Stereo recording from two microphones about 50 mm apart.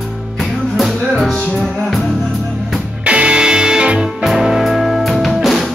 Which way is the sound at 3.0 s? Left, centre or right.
Right.